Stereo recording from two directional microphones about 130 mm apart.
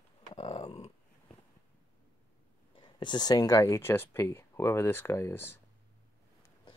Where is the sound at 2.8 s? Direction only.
35° left (ahead or behind); by 5.6 s 20° left (ahead or behind).